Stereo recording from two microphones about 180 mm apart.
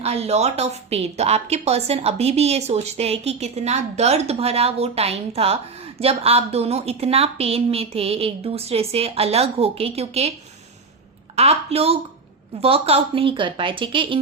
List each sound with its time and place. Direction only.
0.0 s a woman's voice: 35° right (ahead or behind)
11.3 s a woman's voice: 35° right (ahead or behind)